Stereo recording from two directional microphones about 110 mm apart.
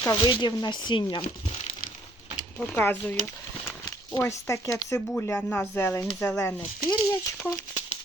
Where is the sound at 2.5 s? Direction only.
20° left (ahead or behind).